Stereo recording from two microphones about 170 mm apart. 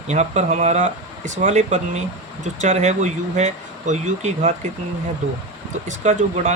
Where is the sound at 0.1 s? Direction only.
40° right (ahead or behind).